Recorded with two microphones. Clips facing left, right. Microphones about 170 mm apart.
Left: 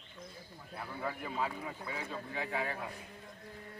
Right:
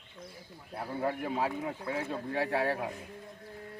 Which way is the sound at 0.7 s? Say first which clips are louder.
Right 7 dB; 40° right (ahead or behind).